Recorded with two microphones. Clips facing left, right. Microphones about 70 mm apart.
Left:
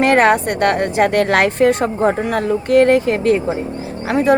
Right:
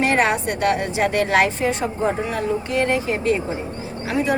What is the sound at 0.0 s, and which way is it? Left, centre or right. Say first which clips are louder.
Speech: left 6 dB; left.